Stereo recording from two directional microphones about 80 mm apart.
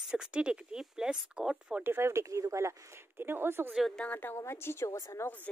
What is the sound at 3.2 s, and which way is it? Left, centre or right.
Speech, right.